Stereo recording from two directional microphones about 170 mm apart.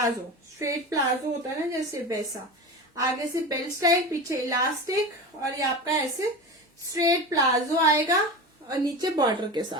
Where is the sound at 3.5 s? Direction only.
20° right (ahead or behind).